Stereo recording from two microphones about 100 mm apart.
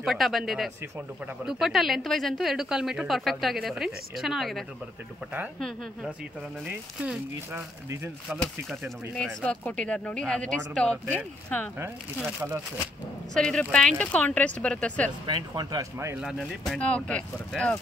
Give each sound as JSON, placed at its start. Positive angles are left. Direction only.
{"t": 0.0, "sound": "speech", "side_deg": 0}
{"t": 6.6, "sound": "speech", "side_deg": -10}
{"t": 7.5, "sound": "speech", "side_deg": -25}
{"t": 8.4, "sound": "speech", "side_deg": 5}
{"t": 13.3, "sound": "speech", "side_deg": 5}
{"t": 15.2, "sound": "speech", "side_deg": -45}
{"t": 16.2, "sound": "speech", "side_deg": 0}
{"t": 16.7, "sound": "speech", "side_deg": 10}